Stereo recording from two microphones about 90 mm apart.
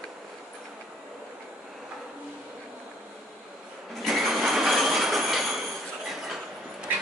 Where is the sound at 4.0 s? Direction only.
Centre (ahead or behind).